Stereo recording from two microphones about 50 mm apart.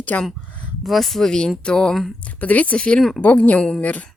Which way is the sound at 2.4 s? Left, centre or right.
Left.